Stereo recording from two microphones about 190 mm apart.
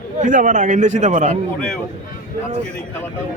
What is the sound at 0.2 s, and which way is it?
A man's voice, 45° right (ahead or behind).